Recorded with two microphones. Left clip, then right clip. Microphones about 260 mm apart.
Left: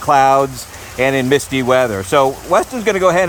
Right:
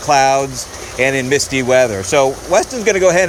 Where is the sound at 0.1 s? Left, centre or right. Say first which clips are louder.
Left 1 dB; centre.